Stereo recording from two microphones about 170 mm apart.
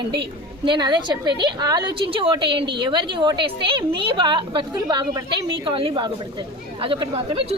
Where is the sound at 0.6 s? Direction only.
25° right (ahead or behind).